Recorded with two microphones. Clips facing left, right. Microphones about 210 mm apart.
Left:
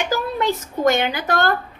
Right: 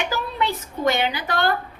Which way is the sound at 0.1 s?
45° left (ahead or behind).